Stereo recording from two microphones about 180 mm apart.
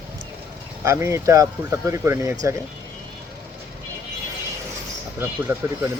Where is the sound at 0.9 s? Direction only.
15° right (ahead or behind).